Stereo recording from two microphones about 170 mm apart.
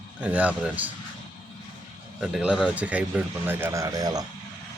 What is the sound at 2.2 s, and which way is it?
Speech, 5° right (ahead or behind).